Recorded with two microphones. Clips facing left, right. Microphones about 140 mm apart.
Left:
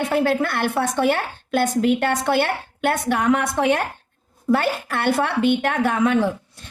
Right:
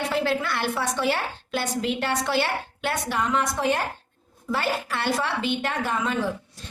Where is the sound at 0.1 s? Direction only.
50° left (ahead or behind).